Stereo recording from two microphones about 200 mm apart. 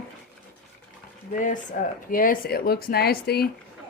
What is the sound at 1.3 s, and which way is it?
Speech, 40° left (ahead or behind).